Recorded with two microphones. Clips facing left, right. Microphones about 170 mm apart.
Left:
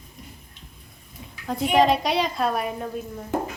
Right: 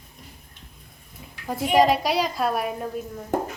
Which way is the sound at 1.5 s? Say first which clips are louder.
Even; centre (ahead or behind).